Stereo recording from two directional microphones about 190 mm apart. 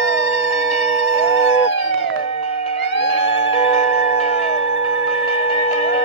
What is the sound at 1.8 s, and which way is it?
Music, 30° left (ahead or behind).